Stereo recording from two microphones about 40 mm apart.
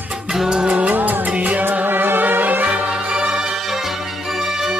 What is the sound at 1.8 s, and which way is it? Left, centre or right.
Music, right.